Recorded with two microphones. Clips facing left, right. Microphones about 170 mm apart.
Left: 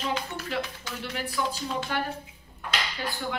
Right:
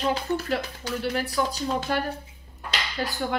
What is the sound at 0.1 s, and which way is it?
Speech, 40° right (ahead or behind).